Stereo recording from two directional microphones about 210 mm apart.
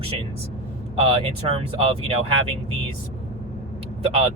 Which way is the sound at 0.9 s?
25° right (ahead or behind).